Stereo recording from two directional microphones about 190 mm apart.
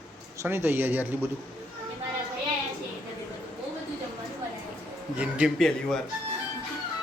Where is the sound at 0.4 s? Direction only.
10° right (ahead or behind).